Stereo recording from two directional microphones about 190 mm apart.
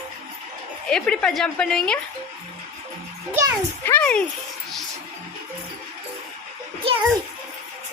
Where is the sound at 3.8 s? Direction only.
10° left (ahead or behind).